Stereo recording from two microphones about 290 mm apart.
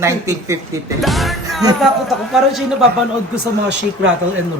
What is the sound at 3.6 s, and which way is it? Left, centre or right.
Speech, right.